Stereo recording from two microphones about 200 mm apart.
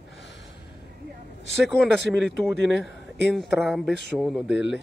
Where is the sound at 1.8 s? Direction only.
Centre (ahead or behind).